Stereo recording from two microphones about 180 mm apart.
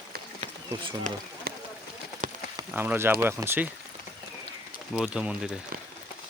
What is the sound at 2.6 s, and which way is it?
Speech, 10° right (ahead or behind).